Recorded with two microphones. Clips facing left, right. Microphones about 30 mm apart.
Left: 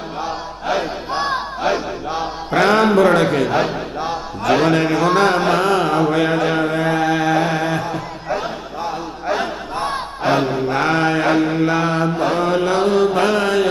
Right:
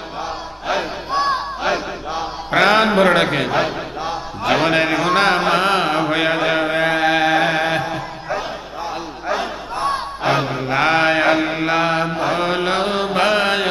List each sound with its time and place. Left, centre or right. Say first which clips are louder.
1.1 s battle cry: right 3 dB; centre
2.5 s a man's voice: even; right
3.5 s a man's voice: left 1 dB; centre
4.7 s a man's voice: left 1 dB; right
5.4 s mantra: even; right
9.2 s a sound: left 1 dB; centre
10.2 s mantra: left 2 dB; centre